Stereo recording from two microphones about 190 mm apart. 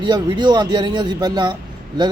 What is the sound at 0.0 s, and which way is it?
A man's voice, 20° right (ahead or behind).